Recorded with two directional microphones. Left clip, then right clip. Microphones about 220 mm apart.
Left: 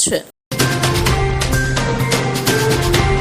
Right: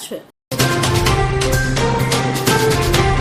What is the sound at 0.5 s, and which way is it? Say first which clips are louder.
Music: even; centre (ahead or behind).